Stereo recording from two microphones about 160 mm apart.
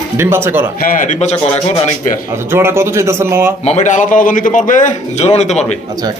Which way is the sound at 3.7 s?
50° left (ahead or behind).